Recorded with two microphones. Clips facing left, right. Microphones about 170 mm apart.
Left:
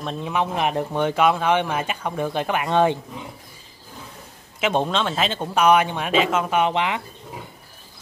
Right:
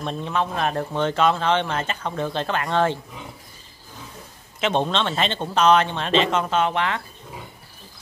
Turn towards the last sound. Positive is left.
turn(degrees=15)  # may be behind; listen again after turning